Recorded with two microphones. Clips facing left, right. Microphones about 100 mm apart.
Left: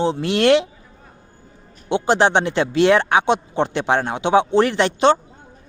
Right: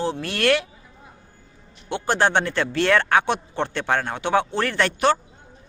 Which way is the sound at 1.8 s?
20° left (ahead or behind).